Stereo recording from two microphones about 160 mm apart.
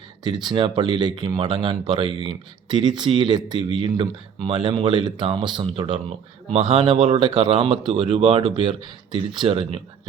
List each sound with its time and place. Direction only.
0.3 s speech: 25° right (ahead or behind)